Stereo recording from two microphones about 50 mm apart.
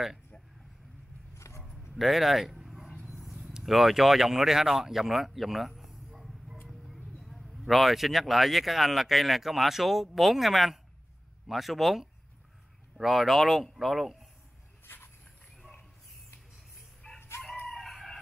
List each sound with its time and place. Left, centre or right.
1.5 s a sound: left
2.0 s bow-wow: centre
3.1 s a sound: centre
6.9 s speech: centre
17.0 s crowing: left
17.6 s chicken: centre